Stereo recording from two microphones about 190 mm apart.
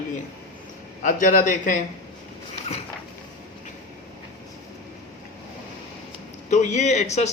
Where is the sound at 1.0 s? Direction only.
45° left (ahead or behind).